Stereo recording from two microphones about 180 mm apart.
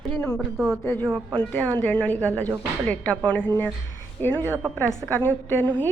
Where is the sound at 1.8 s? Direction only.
10° left (ahead or behind).